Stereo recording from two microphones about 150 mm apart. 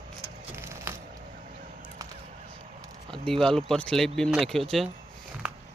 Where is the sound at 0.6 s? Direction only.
20° right (ahead or behind).